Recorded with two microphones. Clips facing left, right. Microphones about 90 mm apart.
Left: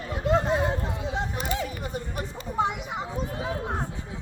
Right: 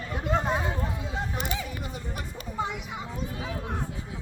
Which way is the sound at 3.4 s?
35° left (ahead or behind).